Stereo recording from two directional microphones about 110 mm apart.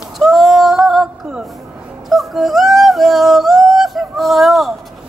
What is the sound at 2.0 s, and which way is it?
Yodeling, centre (ahead or behind).